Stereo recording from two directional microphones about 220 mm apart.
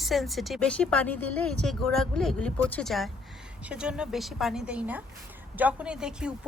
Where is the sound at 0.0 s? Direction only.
Centre (ahead or behind).